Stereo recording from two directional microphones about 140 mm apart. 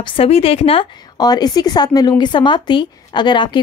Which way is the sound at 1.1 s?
30° left (ahead or behind).